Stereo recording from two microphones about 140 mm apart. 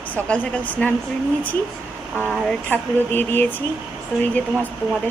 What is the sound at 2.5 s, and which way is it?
Speech, 10° left (ahead or behind).